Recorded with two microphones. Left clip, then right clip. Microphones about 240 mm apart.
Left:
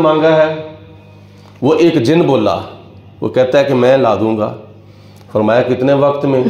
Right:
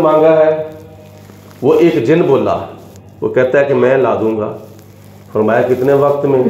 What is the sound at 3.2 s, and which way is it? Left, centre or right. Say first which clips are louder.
Speech: even; left.